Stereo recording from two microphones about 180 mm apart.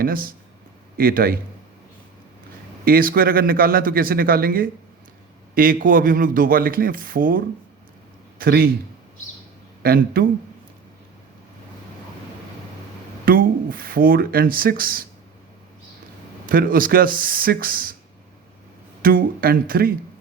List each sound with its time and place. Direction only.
0.0 s a man's voice: 55° right (ahead or behind)
2.8 s a man's voice: 55° right (ahead or behind)
9.8 s a man's voice: 55° right (ahead or behind)
13.2 s speech: 50° right (ahead or behind)
16.5 s speech: 50° right (ahead or behind)
19.0 s speech: 55° right (ahead or behind)